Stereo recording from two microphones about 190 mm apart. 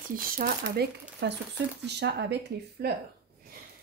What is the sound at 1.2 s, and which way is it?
Speech, 65° right (ahead or behind).